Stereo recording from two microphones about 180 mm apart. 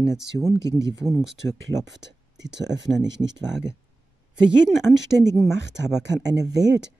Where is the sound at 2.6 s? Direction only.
80° right.